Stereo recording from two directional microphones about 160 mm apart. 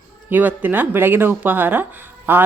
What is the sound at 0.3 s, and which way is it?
Speech, 10° right (ahead or behind).